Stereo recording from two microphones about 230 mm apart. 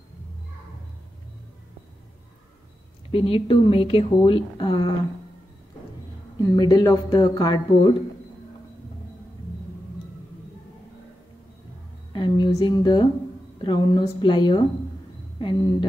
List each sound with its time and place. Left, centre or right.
3.1 s a woman's voice: left
6.5 s speech: centre
12.1 s a woman's voice: centre